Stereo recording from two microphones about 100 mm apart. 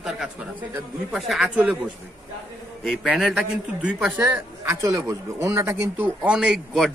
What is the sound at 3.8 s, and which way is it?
Speech, 10° right (ahead or behind).